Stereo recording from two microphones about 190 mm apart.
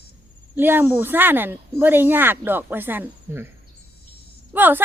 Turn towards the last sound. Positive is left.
turn(degrees=-10)  # may be behind; listen again after turning